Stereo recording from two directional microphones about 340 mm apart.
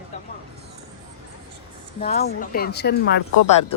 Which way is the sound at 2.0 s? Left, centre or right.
Left.